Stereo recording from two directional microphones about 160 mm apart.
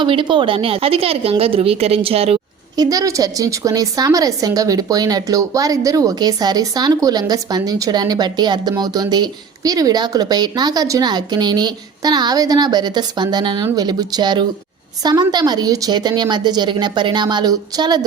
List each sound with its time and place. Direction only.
0.0 s a woman's voice: 30° right (ahead or behind)
2.7 s a woman's voice: 25° right (ahead or behind)